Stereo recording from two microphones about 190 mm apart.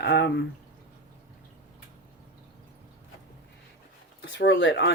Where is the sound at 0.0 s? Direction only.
65° left (ahead or behind).